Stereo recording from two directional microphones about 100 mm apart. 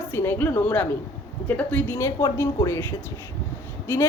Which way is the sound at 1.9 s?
30° left (ahead or behind).